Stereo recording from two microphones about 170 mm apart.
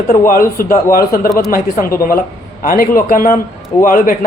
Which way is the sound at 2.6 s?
55° left (ahead or behind).